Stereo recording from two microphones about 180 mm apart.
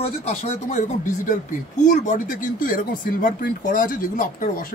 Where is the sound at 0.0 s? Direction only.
35° left (ahead or behind).